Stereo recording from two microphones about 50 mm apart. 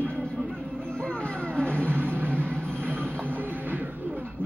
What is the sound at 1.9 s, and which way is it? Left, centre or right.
Music, right.